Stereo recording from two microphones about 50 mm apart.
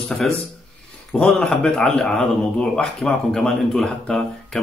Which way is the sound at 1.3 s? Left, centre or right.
Centre.